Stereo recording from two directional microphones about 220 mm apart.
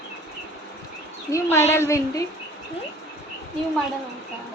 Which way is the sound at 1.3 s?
15° left (ahead or behind).